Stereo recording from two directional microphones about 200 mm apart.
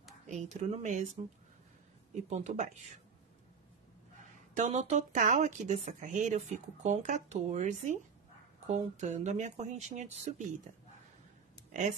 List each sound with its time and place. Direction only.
0.3 s speech: 35° right (ahead or behind)
2.2 s speech: 35° right (ahead or behind)
4.6 s speech: 35° right (ahead or behind)